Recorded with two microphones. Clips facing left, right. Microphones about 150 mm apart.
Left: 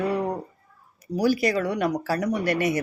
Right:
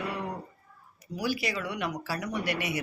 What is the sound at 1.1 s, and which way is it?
Speech, 45° left (ahead or behind).